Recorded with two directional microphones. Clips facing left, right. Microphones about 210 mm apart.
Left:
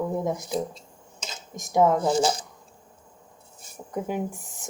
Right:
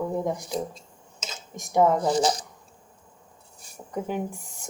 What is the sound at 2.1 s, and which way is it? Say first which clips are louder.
Speech: even; 25° left (ahead or behind).